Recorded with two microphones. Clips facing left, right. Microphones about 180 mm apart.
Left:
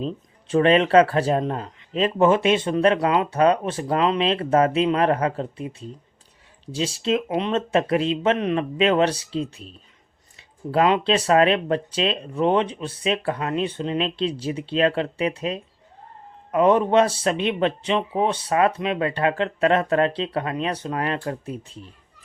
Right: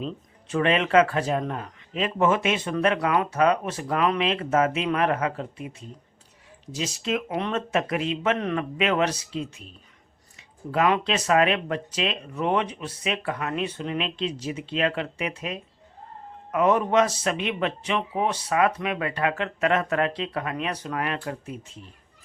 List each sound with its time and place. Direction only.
0.0 s speech: 30° left (ahead or behind)
8.4 s speech: 20° left (ahead or behind)
8.8 s speech: 30° left (ahead or behind)
10.7 s speech: 30° left (ahead or behind)